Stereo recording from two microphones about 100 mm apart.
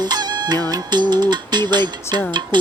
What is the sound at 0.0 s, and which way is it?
Music, 45° right (ahead or behind).